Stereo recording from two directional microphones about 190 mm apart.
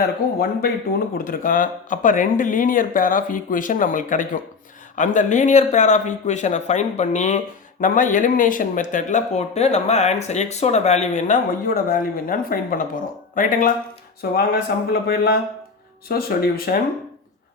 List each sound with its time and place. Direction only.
0.0 s speech: 55° left (ahead or behind)
14.2 s a sound: 55° left (ahead or behind)
16.0 s speech: 50° left (ahead or behind)